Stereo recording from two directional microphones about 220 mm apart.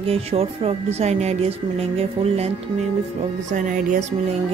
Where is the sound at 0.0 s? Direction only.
25° right (ahead or behind).